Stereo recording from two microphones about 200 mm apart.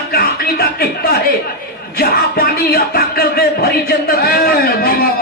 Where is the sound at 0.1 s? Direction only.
50° left (ahead or behind).